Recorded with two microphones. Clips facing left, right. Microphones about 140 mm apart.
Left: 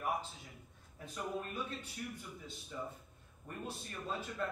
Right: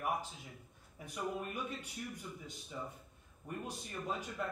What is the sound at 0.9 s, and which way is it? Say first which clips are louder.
A man's voice: right 1 dB; 15° right (ahead or behind).